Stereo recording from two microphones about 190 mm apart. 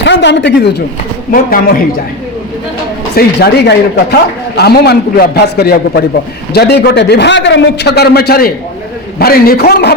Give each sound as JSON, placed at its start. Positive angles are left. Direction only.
{"t": 0.0, "sound": "a man's voice", "side_deg": 70}
{"t": 1.3, "sound": "a man's voice", "side_deg": 50}
{"t": 3.2, "sound": "a man's voice", "side_deg": 60}